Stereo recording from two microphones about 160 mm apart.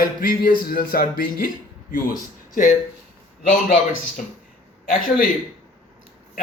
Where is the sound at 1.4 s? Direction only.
60° left (ahead or behind).